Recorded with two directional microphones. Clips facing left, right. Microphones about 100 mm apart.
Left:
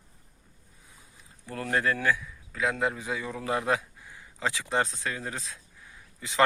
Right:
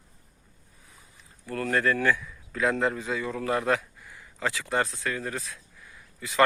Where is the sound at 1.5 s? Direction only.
20° left (ahead or behind).